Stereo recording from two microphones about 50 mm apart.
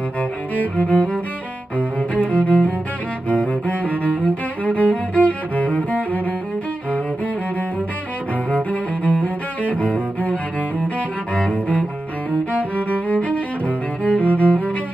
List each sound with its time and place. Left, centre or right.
0.7 s music: left
1.8 s cello: left
9.2 s cello: left
12.7 s music: left